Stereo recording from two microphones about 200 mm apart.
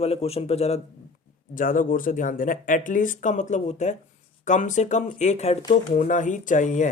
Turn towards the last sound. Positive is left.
turn(degrees=40)  # may be behind; listen again after turning